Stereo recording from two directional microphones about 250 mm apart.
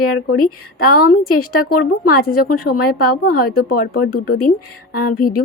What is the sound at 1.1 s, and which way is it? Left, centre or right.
A woman's voice, left.